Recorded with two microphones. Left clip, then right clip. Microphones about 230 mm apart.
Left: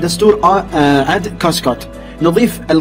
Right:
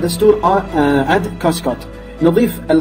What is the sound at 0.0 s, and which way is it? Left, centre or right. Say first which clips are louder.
Speech: left 2 dB; left.